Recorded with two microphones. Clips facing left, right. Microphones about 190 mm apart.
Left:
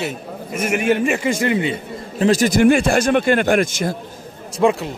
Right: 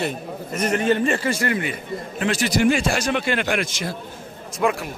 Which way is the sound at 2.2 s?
45° left (ahead or behind).